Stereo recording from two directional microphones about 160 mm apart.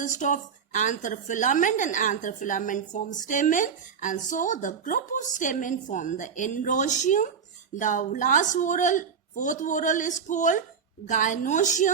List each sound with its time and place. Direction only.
0.0 s a woman's voice: 50° left (ahead or behind)